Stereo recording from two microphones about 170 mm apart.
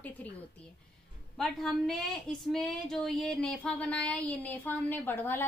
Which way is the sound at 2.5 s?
Centre (ahead or behind).